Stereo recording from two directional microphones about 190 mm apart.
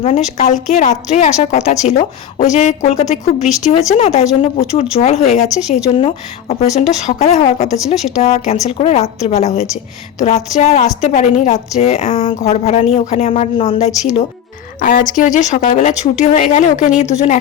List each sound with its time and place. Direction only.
0.3 s a woman's voice: 40° left (ahead or behind)